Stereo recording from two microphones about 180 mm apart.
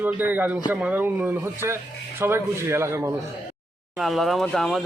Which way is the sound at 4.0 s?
Centre (ahead or behind).